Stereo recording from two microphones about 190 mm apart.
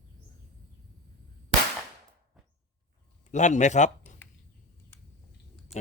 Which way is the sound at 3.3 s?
40° left (ahead or behind).